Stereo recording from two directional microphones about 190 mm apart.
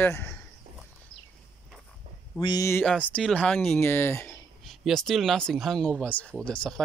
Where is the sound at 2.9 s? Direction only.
5° left (ahead or behind).